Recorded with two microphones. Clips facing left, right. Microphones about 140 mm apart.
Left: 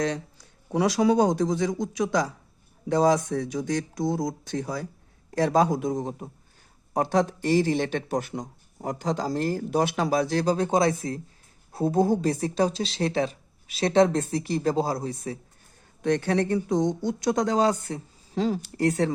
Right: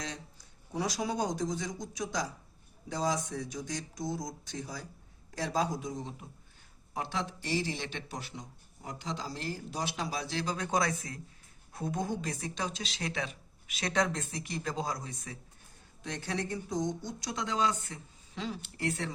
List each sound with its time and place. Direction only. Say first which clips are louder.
0.0 s speech: left 14 dB; 70° left (ahead or behind); by 15.4 s 35° left (ahead or behind)
16.0 s speech: left 13 dB; 60° left (ahead or behind)